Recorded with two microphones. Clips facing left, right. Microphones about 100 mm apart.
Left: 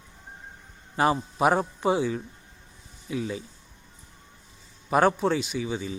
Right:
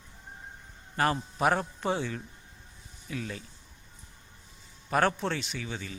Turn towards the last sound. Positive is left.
turn(degrees=15)  # may be behind; listen again after turning